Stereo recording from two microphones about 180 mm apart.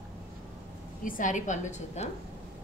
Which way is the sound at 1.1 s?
45° left (ahead or behind).